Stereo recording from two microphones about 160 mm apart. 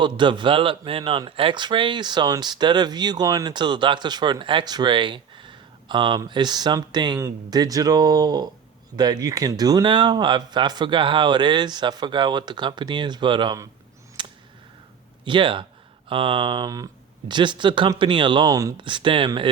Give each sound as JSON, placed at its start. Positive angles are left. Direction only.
{"t": 0.0, "sound": "speech", "side_deg": -30}
{"t": 14.2, "sound": "a sound", "side_deg": -30}
{"t": 15.2, "sound": "speech", "side_deg": -30}